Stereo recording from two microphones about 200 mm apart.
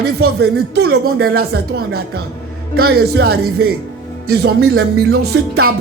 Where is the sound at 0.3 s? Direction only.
55° right (ahead or behind).